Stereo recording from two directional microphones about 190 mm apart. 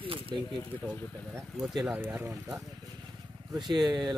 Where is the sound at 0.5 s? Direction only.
10° left (ahead or behind).